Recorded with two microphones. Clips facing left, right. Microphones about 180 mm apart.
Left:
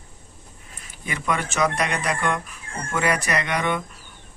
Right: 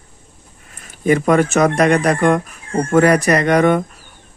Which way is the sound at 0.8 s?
45° right (ahead or behind).